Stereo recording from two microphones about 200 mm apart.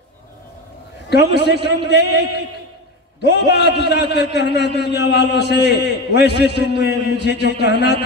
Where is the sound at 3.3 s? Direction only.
55° left (ahead or behind).